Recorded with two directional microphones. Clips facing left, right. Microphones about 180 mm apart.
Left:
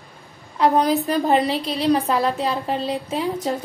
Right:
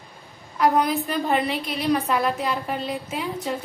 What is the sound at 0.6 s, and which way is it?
A woman's voice, 35° left (ahead or behind).